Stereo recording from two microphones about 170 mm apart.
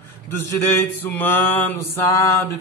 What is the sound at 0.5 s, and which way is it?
Mantra, 15° left (ahead or behind).